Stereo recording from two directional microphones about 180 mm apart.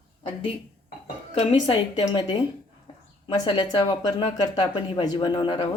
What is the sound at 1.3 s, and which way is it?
A woman's voice, 30° left (ahead or behind).